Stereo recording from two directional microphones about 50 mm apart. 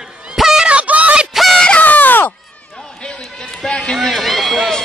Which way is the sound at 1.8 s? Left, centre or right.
Left.